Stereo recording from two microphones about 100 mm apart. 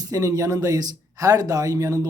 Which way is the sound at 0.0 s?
35° right (ahead or behind).